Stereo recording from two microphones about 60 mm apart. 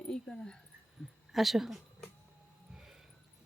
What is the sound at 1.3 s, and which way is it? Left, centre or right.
Speech, centre.